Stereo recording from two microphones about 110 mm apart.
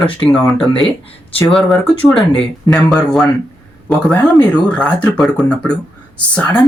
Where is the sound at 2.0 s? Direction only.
5° left (ahead or behind).